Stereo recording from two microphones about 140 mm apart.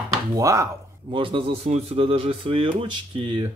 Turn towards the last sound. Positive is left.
turn(degrees=-35)  # may be behind; listen again after turning